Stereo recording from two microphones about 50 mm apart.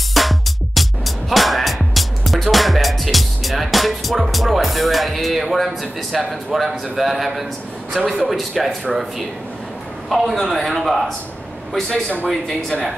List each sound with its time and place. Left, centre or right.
0.1 s music: centre
4.3 s speech: centre
8.0 s speech: centre
8.3 s speech: centre
10.0 s speech: centre
11.9 s speech: left
12.3 s speech: centre